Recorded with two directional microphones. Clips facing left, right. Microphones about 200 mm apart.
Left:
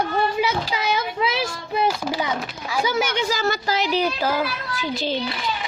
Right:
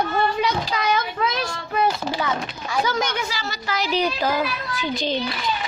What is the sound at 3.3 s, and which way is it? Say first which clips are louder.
Speech: left 8 dB; 50° left (ahead or behind).